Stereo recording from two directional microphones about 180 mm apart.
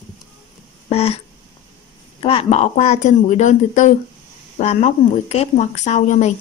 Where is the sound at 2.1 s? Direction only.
30° left (ahead or behind).